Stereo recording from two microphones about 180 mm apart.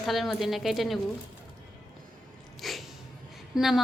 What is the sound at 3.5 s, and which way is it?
Speech, centre (ahead or behind).